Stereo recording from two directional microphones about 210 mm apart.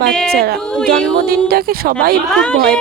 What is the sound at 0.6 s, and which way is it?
Speech, 5° left (ahead or behind).